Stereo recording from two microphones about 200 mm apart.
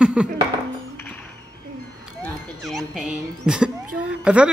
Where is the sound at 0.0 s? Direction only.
5° right (ahead or behind).